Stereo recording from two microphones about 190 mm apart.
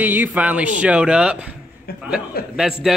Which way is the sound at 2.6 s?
Centre (ahead or behind).